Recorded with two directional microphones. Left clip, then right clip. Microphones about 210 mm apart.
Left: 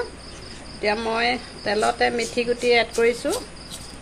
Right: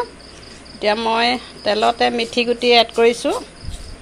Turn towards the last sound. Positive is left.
turn(degrees=-20)  # may be behind; listen again after turning